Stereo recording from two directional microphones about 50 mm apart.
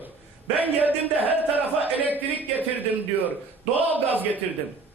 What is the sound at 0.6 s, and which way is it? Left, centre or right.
A man's voice, right.